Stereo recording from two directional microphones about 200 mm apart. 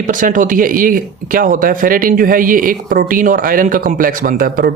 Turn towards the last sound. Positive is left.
turn(degrees=-45)  # may be behind; listen again after turning